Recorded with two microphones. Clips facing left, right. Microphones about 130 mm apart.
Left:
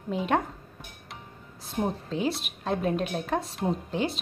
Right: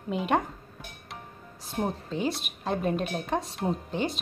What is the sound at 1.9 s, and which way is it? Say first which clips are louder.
A woman's voice: left 1 dB; centre (ahead or behind).